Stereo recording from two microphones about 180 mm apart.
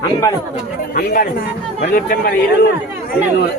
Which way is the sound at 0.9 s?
50° left (ahead or behind).